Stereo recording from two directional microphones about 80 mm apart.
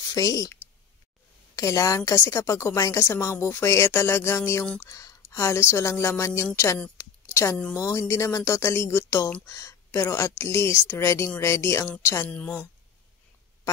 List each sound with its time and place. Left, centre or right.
0.1 s a woman's voice: left
7.0 s a sound: left
7.9 s a woman's voice: left
12.3 s a woman's voice: centre